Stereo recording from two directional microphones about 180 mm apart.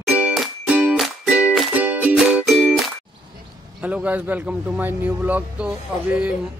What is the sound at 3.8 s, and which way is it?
A man's voice, 5° right (ahead or behind).